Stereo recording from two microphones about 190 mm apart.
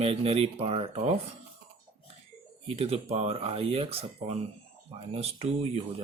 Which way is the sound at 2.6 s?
30° right (ahead or behind).